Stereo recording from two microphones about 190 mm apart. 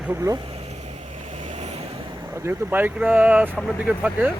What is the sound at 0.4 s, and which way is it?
Vehicle, 30° right (ahead or behind).